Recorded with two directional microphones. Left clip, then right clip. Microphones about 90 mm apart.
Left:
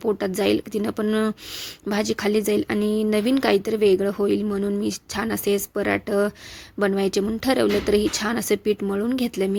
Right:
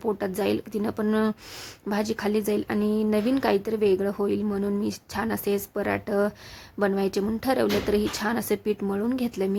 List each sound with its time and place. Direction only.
0.0 s speech: 25° left (ahead or behind)